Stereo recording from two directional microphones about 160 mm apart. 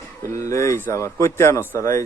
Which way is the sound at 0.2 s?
20° left (ahead or behind).